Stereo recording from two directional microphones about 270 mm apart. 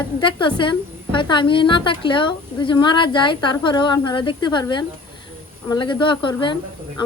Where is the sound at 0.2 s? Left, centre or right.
Centre.